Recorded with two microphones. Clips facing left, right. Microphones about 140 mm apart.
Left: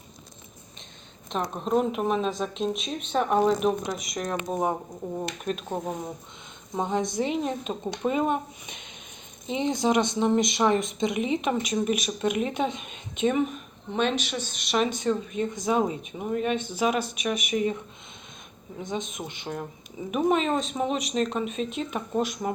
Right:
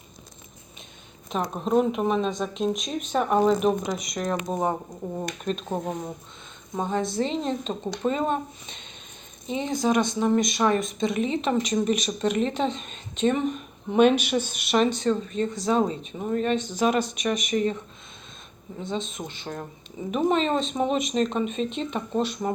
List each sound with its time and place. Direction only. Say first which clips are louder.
1.3 s speech: right 2 dB; centre (ahead or behind)
6.7 s speech: right 1 dB; 20° left (ahead or behind)
13.9 s speech: right 8 dB; 10° right (ahead or behind)
14.9 s speech: right 2 dB; 10° left (ahead or behind)
18.8 s speech: right 1 dB; 15° left (ahead or behind)